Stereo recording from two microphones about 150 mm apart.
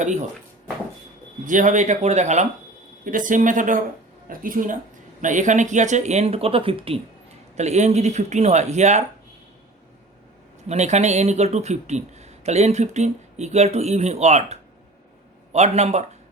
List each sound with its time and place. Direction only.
0.0 s speech: 55° right (ahead or behind)
1.5 s speech: 60° right (ahead or behind)
3.0 s speech: 65° right (ahead or behind); by 7.0 s 40° right (ahead or behind)
7.5 s speech: 50° right (ahead or behind)
10.7 s speech: 50° right (ahead or behind)